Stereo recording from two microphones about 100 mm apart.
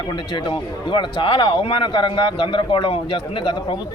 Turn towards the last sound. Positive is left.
turn(degrees=50)  # may be behind; listen again after turning